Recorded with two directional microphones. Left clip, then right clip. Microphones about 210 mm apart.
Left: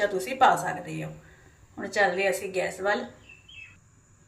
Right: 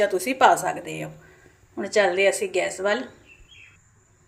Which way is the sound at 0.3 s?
45° right (ahead or behind).